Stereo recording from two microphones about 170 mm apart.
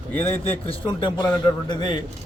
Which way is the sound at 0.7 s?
30° left (ahead or behind).